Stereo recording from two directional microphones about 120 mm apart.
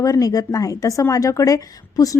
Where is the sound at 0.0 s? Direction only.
30° left (ahead or behind).